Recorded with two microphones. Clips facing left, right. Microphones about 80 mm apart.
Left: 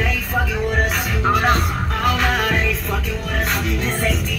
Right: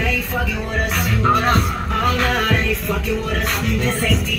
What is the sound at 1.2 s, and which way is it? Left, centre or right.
Music, centre.